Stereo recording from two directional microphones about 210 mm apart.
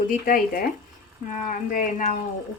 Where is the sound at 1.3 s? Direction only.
40° left (ahead or behind).